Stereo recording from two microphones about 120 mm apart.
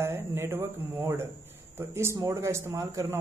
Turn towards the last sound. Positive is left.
turn(degrees=-25)  # may be behind; listen again after turning